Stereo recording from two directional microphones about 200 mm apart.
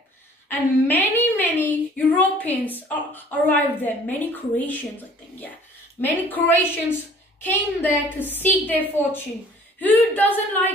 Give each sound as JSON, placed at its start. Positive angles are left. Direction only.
{"t": 0.5, "sound": "a woman's voice", "side_deg": 10}
{"t": 5.9, "sound": "a woman's voice", "side_deg": 10}